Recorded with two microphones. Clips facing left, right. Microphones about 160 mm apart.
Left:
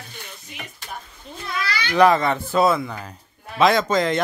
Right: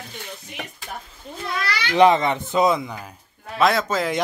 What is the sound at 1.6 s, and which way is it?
Speech, 70° right (ahead or behind).